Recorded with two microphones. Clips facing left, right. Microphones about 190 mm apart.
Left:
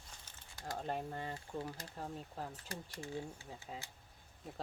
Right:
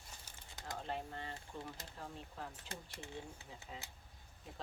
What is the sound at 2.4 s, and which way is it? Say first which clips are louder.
Speech: left 3 dB; 40° left (ahead or behind).